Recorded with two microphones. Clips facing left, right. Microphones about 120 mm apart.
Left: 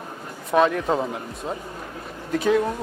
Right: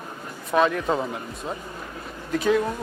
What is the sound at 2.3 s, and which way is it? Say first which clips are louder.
Speech: left 1 dB; 40° left (ahead or behind).